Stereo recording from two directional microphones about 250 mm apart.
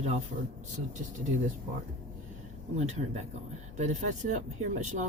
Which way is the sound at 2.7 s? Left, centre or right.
Right.